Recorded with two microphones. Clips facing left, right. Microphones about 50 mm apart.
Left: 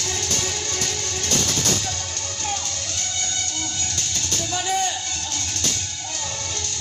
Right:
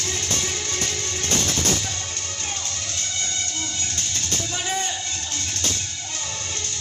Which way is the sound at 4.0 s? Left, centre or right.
Right.